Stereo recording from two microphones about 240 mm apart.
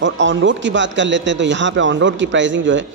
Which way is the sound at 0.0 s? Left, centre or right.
Right.